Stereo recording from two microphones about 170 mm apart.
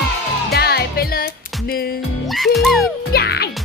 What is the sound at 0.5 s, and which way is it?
Music, 70° left (ahead or behind).